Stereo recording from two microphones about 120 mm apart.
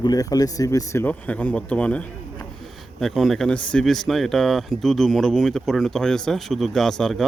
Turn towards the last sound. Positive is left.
turn(degrees=5)  # may be behind; listen again after turning